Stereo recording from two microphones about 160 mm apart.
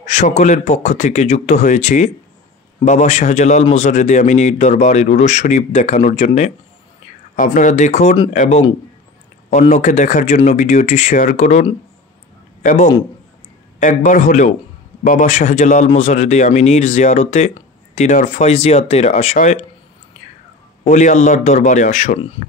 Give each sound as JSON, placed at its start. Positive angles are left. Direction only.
{"t": 0.0, "sound": "a man's voice", "side_deg": 45}
{"t": 18.5, "sound": "speech", "side_deg": 40}
{"t": 20.8, "sound": "a man's voice", "side_deg": 50}